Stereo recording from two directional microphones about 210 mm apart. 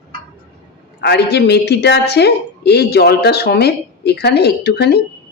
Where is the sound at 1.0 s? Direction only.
50° left (ahead or behind).